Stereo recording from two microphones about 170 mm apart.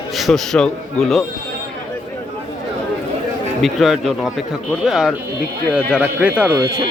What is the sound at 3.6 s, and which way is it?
A man's voice, centre (ahead or behind).